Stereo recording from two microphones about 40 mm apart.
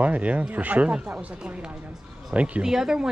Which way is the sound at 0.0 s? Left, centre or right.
Right.